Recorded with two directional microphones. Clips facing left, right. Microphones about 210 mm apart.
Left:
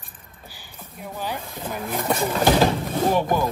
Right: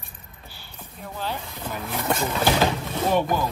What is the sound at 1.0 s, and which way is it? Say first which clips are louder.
Speech: left 1 dB; 15° left (ahead or behind).